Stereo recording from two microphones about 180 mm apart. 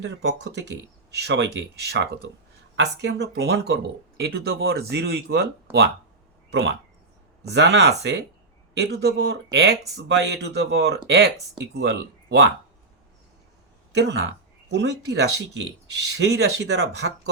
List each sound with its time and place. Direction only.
0.0 s speech: 80° right
2.7 s speech: 75° right (ahead or behind)
6.5 s speech: 75° right (ahead or behind)
14.7 s speech: 70° right (ahead or behind)